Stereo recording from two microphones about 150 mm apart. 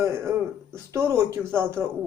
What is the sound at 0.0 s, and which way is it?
A man's voice, 20° right (ahead or behind).